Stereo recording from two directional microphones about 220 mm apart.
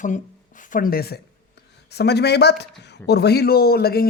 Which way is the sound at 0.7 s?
40° left (ahead or behind).